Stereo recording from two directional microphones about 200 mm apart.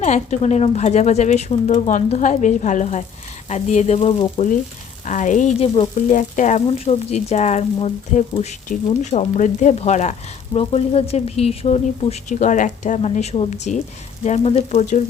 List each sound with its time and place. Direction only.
0.0 s speech: 35° left (ahead or behind)